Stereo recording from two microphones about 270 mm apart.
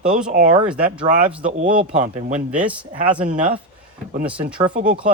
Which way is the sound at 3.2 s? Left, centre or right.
Right.